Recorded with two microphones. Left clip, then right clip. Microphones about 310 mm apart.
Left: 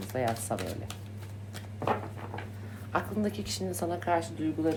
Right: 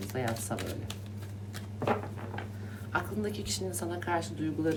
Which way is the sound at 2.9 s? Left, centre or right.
Centre.